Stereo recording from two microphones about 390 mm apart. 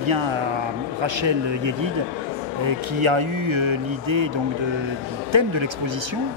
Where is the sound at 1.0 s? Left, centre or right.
Right.